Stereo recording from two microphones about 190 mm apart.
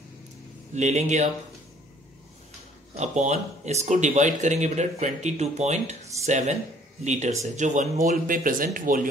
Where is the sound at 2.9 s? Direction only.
35° right (ahead or behind).